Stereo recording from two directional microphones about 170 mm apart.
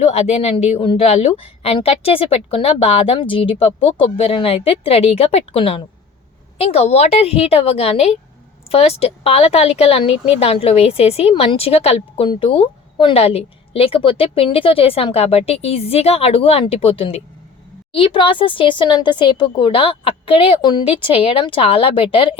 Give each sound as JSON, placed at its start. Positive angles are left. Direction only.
{"t": 0.0, "sound": "a woman's voice", "side_deg": 40}